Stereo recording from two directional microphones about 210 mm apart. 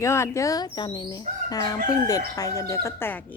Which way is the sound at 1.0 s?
20° left (ahead or behind).